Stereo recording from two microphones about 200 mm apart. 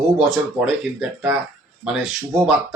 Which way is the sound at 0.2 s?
Centre (ahead or behind).